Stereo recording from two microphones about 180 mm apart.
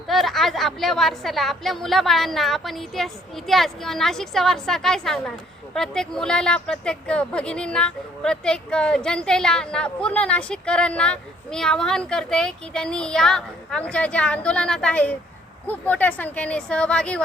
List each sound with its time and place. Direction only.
0.1 s speech: centre (ahead or behind)